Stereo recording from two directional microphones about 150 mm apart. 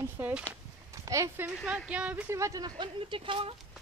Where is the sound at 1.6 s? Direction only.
5° right (ahead or behind); by 3.6 s 35° right (ahead or behind).